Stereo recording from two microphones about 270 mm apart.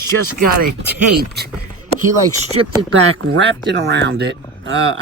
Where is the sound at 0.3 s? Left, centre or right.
Right.